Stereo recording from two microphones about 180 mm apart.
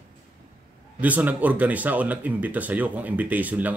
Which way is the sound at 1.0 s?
10° right (ahead or behind).